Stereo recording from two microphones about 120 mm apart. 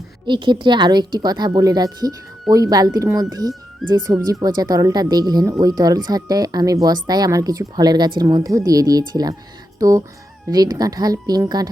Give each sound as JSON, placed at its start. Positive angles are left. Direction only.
{"t": 0.3, "sound": "a woman's voice", "side_deg": -40}